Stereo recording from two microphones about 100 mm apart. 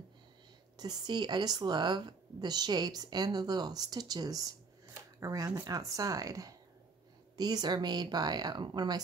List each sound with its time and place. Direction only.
0.7 s a woman's voice: 45° right (ahead or behind)